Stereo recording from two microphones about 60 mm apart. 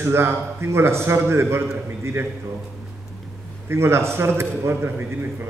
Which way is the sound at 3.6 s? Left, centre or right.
Right.